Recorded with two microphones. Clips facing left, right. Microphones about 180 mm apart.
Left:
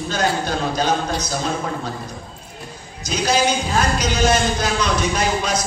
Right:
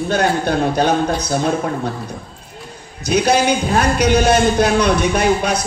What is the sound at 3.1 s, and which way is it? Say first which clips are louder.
A man's voice: right 5 dB; 60° right (ahead or behind).